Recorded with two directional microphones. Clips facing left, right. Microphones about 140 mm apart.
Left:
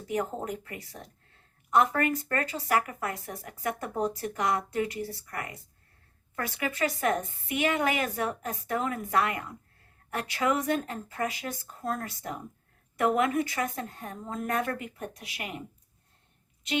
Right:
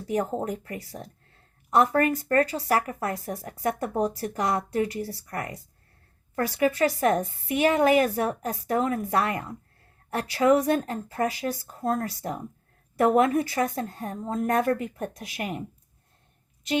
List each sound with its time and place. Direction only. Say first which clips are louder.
0.1 s a woman's voice: right 4 dB; 35° right (ahead or behind)